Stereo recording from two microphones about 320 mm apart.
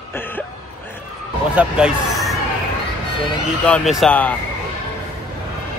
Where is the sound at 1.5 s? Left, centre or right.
Centre.